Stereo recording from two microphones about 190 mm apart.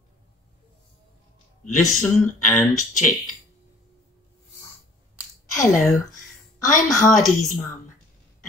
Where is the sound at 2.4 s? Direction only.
10° left (ahead or behind).